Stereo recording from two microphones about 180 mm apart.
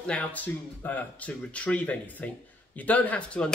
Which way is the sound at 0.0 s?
5° left (ahead or behind).